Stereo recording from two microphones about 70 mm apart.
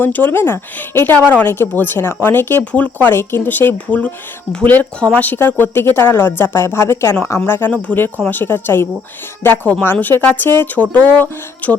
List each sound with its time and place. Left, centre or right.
0.0 s a woman's voice: left
3.1 s a woman's voice: left